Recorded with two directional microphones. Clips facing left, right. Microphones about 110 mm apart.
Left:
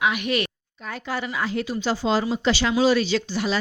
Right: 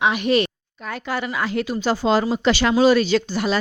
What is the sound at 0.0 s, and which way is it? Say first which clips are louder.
Speech: right 5 dB; 30° right (ahead or behind).